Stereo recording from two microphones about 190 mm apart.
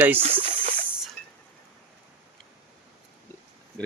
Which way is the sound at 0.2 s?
30° right (ahead or behind).